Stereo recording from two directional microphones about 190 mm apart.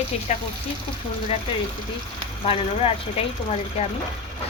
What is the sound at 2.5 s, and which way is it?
Speech, 30° left (ahead or behind).